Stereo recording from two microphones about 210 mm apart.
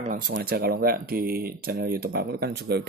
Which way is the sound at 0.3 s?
50° right (ahead or behind).